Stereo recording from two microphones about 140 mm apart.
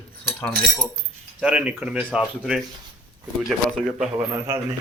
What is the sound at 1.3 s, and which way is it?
Speech, 5° right (ahead or behind).